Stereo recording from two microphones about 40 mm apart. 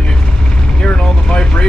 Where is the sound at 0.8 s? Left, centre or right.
Left.